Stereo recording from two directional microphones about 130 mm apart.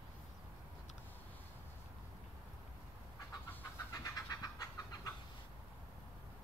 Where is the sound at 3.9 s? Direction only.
30° left (ahead or behind).